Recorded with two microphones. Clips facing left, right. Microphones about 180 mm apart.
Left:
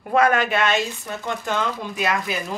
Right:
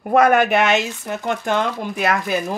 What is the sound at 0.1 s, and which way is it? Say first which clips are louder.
Speech: right 4 dB; 60° right (ahead or behind).